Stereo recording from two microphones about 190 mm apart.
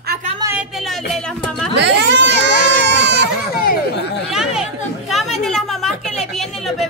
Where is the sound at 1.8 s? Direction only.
65° right (ahead or behind).